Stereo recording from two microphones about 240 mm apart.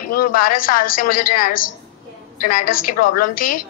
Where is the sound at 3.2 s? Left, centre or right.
Left.